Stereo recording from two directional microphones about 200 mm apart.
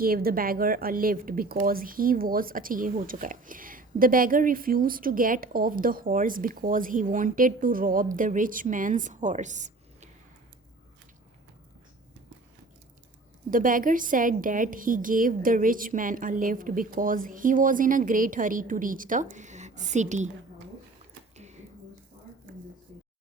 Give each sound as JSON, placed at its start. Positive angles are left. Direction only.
{"t": 0.0, "sound": "a woman's voice", "side_deg": -45}
{"t": 13.5, "sound": "a woman's voice", "side_deg": -45}
{"t": 21.3, "sound": "a sound", "side_deg": -35}